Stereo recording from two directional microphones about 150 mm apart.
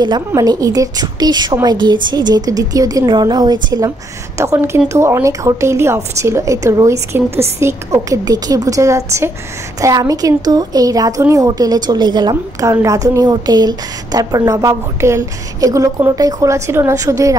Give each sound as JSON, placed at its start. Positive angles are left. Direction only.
{"t": 0.3, "sound": "a woman's voice", "side_deg": -25}